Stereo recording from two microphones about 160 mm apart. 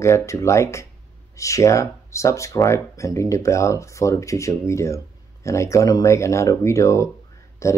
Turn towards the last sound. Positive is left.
turn(degrees=20)  # may be behind; listen again after turning